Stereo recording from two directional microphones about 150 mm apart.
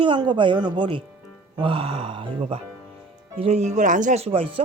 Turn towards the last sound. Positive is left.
turn(degrees=-40)  # may be behind; listen again after turning